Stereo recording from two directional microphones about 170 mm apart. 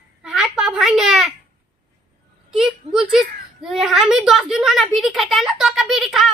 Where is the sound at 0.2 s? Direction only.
5° right (ahead or behind).